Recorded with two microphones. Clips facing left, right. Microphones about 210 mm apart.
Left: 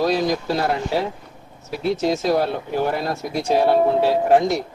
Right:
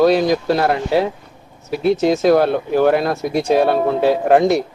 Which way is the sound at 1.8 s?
60° right (ahead or behind).